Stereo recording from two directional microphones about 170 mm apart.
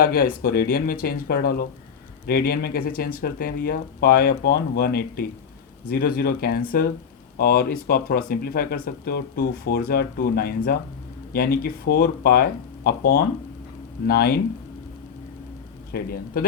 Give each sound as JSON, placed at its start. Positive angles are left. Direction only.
{"t": 0.0, "sound": "speech", "side_deg": 60}
{"t": 15.9, "sound": "speech", "side_deg": 65}